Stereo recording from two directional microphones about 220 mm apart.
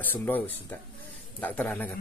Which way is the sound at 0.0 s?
10° left (ahead or behind).